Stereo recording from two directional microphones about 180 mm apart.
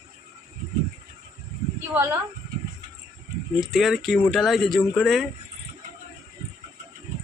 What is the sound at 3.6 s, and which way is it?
Speech, centre (ahead or behind).